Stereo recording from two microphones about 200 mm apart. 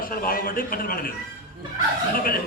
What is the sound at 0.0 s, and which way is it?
A man's voice, 45° left (ahead or behind).